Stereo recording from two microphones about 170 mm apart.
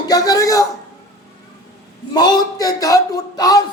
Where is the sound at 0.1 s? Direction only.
20° left (ahead or behind).